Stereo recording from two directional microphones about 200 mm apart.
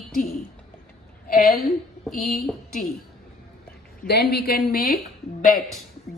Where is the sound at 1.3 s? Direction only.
45° left (ahead or behind).